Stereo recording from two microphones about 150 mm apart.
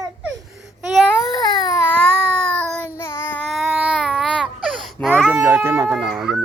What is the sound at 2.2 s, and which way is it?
Child singing, 5° left (ahead or behind).